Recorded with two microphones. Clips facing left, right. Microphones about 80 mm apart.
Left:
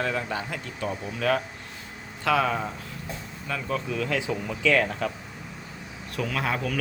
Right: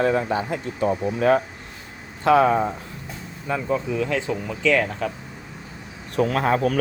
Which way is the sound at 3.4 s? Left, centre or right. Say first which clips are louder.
Right 6 dB; centre.